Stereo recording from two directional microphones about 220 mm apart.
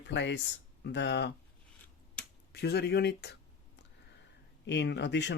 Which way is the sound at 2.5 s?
50° left (ahead or behind).